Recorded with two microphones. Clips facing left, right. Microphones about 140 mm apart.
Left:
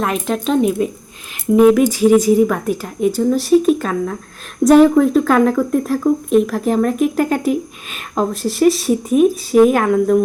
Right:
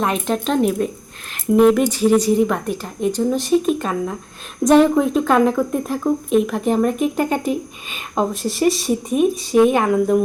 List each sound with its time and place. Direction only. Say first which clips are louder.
0.0 s speech: left 1 dB; centre (ahead or behind)